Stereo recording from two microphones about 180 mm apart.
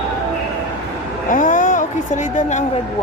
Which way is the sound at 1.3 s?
45° left (ahead or behind).